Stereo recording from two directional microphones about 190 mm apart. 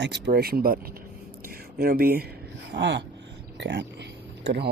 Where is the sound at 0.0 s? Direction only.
60° right (ahead or behind).